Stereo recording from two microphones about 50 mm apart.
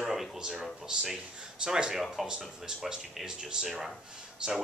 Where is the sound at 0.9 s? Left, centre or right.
Centre.